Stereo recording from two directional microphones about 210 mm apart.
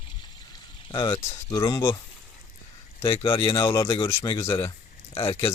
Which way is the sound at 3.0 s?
25° left (ahead or behind).